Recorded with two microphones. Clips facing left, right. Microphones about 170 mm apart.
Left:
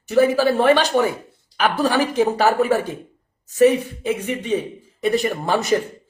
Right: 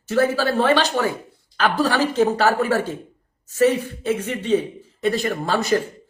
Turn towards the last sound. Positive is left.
turn(degrees=20)  # may be behind; listen again after turning